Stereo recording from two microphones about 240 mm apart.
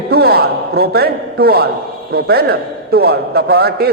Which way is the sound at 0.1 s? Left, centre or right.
Right.